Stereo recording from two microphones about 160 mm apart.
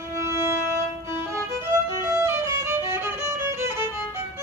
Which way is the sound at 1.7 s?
15° right (ahead or behind).